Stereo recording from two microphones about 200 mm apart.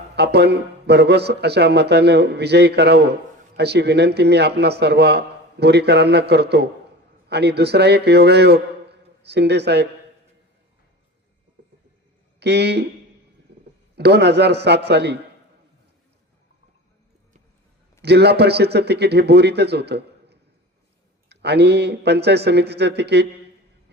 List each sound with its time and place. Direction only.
0.2 s a man's voice: 55° right (ahead or behind)
12.4 s a man's voice: 55° right (ahead or behind)
13.5 s a sound: 55° right (ahead or behind)
13.9 s a man's voice: 55° right (ahead or behind)
18.0 s a man's voice: 55° right (ahead or behind)